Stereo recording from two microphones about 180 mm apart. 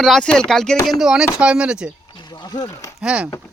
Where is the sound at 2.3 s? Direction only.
20° left (ahead or behind).